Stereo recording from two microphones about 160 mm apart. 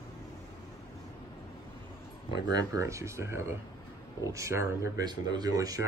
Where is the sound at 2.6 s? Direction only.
20° right (ahead or behind).